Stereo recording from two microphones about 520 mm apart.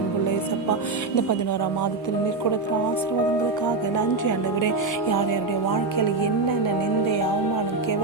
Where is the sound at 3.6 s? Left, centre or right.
Left.